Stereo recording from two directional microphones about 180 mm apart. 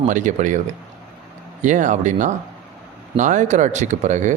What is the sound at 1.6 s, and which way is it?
A man's voice, 45° right (ahead or behind).